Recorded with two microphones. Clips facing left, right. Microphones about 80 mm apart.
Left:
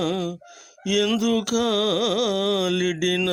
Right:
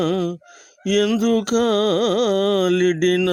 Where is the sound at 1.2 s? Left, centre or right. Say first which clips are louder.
Right 4 dB; right.